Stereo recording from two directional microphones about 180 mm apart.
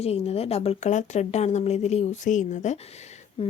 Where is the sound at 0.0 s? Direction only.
35° left (ahead or behind).